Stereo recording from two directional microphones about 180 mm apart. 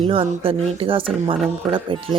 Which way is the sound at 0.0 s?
30° right (ahead or behind).